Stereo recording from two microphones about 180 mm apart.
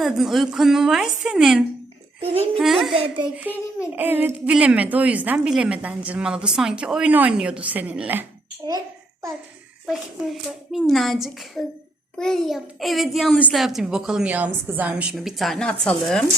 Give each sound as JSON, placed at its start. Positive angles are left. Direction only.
{"t": 0.0, "sound": "a child's voice", "side_deg": 0}
{"t": 2.2, "sound": "speech", "side_deg": -35}
{"t": 2.6, "sound": "a child's voice", "side_deg": 0}
{"t": 2.9, "sound": "speech", "side_deg": -30}
{"t": 3.9, "sound": "a woman's voice", "side_deg": -10}
{"t": 9.8, "sound": "a child's voice", "side_deg": 0}